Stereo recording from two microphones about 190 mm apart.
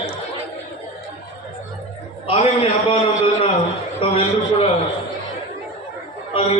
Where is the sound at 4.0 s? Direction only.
30° left (ahead or behind).